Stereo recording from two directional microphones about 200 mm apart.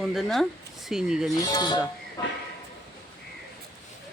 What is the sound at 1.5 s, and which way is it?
Speech, 20° left (ahead or behind).